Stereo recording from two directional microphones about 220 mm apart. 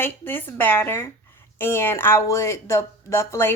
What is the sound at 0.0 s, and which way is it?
A woman's voice, 10° left (ahead or behind).